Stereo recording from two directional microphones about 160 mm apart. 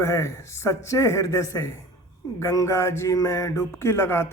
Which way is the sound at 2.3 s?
20° left (ahead or behind).